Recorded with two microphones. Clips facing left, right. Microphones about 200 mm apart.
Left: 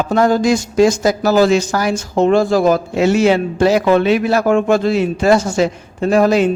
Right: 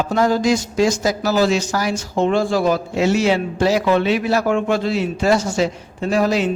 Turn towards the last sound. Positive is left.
turn(degrees=50)  # may be behind; listen again after turning